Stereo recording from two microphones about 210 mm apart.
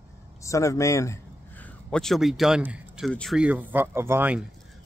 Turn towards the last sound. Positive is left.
turn(degrees=-10)  # may be behind; listen again after turning